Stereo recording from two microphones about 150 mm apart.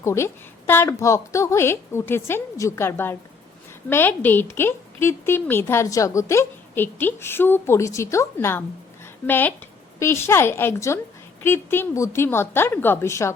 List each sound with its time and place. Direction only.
0.0 s a woman's voice: 20° left (ahead or behind)